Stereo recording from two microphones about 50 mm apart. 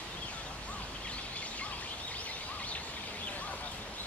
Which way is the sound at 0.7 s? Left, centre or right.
Left.